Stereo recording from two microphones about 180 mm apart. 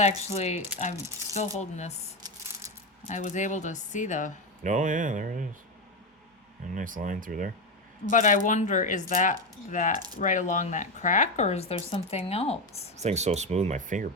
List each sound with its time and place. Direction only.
0.2 s speech: 35° left (ahead or behind)
3.1 s speech: 40° left (ahead or behind)
4.6 s speech: 45° right (ahead or behind)
6.7 s speech: 50° right (ahead or behind)
8.1 s speech: 45° left (ahead or behind)
13.0 s speech: 40° right (ahead or behind)